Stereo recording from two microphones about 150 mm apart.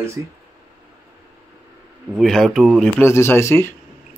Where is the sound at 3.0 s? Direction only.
15° left (ahead or behind).